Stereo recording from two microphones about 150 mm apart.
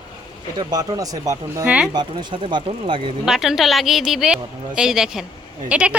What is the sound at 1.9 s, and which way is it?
Speech, 30° right (ahead or behind).